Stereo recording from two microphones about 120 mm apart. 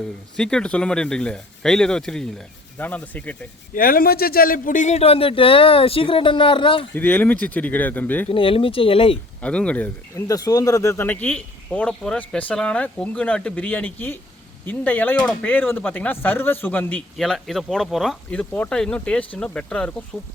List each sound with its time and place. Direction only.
0.3 s speech: 5° left (ahead or behind)
4.7 s speech: 80° left; by 6.8 s 45° left (ahead or behind)
6.9 s speech: 15° left (ahead or behind)
8.3 s speech: 50° left (ahead or behind)
9.4 s speech: 10° left (ahead or behind)
10.2 s speech: 30° left (ahead or behind)
17.2 s speech: centre (ahead or behind)